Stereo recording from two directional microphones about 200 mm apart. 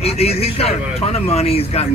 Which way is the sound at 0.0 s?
30° left (ahead or behind).